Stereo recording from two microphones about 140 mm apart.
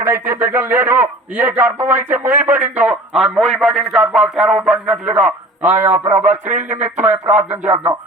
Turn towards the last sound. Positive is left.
turn(degrees=-15)  # may be behind; listen again after turning